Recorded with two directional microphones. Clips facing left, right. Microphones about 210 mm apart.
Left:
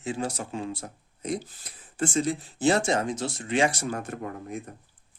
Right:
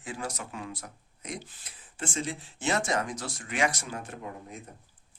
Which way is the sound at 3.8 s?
45° left (ahead or behind).